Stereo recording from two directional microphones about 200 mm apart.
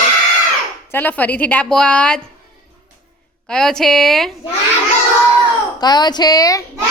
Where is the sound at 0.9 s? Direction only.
10° left (ahead or behind).